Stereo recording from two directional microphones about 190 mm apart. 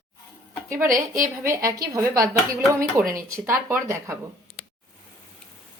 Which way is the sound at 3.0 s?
45° right (ahead or behind).